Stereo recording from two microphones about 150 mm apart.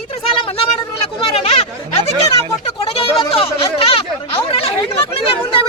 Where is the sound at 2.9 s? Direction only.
40° left (ahead or behind).